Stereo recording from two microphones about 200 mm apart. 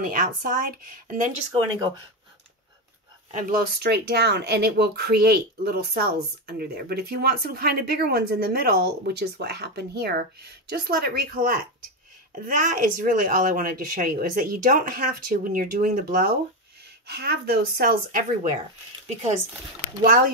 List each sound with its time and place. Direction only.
0.0 s speech: 45° right (ahead or behind)
3.3 s speech: 40° right (ahead or behind)